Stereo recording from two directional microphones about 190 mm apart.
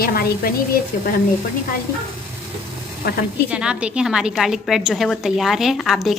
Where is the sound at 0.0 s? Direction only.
50° left (ahead or behind).